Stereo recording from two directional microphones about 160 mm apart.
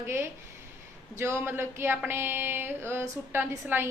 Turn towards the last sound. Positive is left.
turn(degrees=-15)  # may be behind; listen again after turning